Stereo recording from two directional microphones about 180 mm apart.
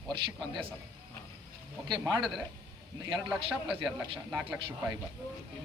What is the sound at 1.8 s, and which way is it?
Speech, 25° right (ahead or behind).